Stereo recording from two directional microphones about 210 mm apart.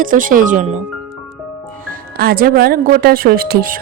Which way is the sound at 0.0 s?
40° right (ahead or behind).